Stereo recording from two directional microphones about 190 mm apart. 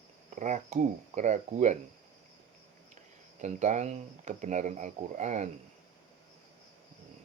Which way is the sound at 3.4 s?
40° right (ahead or behind).